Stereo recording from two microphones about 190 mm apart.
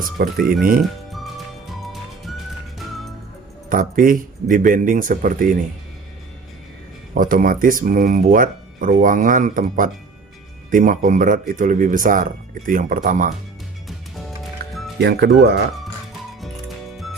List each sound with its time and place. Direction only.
0.0 s speech: 50° right (ahead or behind)
1.8 s music: centre (ahead or behind)
3.7 s speech: 45° right (ahead or behind)
7.1 s speech: 45° right (ahead or behind)
13.8 s music: centre (ahead or behind)
15.0 s speech: 60° right (ahead or behind)
16.4 s music: centre (ahead or behind)